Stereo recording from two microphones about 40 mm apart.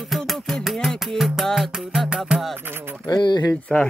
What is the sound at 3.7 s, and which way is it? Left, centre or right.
Speech, left.